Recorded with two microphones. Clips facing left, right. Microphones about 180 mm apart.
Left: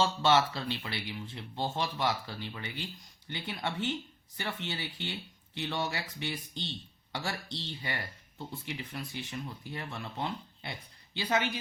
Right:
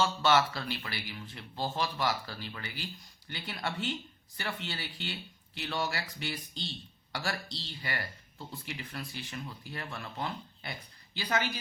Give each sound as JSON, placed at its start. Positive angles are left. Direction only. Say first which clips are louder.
{"t": 0.0, "sound": "speech", "louder": "left 1 dB", "side_deg": 25}